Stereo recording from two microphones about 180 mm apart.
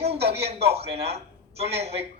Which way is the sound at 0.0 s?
35° right (ahead or behind).